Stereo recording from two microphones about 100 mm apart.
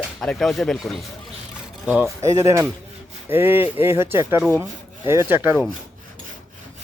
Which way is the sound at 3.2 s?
25° right (ahead or behind).